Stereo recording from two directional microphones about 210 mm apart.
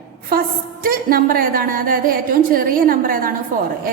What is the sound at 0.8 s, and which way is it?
A woman's voice, 45° right (ahead or behind).